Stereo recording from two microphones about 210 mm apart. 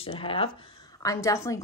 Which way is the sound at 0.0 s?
25° left (ahead or behind).